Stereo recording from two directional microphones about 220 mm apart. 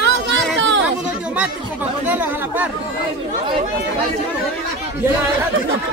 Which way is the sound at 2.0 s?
10° right (ahead or behind).